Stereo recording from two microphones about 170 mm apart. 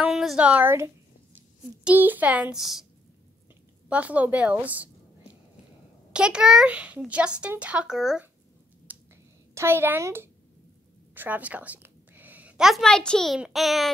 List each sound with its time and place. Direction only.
0.0 s a sound: centre (ahead or behind)
1.9 s speech: 10° right (ahead or behind)
3.9 s speech: 10° right (ahead or behind)
6.1 s a child's voice: 5° right (ahead or behind)
8.9 s a sound: 10° right (ahead or behind)
9.5 s a woman's voice: 15° right (ahead or behind)